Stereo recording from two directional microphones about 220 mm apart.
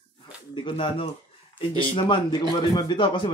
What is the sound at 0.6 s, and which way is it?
Speech, 25° left (ahead or behind).